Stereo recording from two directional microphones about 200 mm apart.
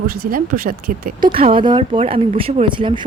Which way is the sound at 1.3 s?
25° right (ahead or behind).